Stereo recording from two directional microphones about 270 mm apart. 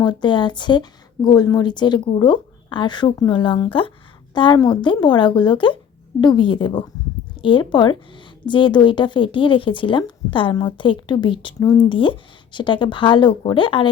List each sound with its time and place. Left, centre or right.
0.0 s speech: centre